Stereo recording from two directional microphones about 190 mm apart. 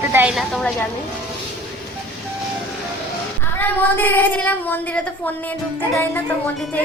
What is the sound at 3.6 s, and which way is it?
Female singing, 10° left (ahead or behind).